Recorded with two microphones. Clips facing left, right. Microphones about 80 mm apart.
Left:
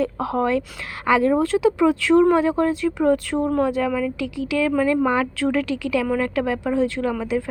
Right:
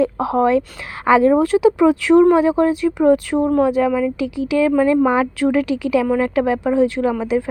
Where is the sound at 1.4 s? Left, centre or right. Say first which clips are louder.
Right 4 dB; centre.